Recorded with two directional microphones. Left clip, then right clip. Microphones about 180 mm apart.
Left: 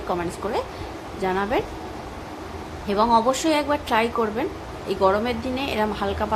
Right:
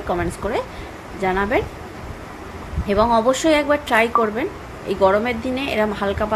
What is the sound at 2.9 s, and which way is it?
A woman's voice, 15° right (ahead or behind).